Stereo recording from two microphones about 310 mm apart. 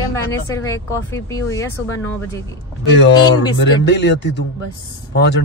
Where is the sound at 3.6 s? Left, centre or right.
Left.